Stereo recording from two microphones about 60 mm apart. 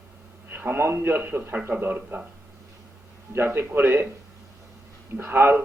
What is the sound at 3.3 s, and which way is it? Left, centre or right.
Speech, right.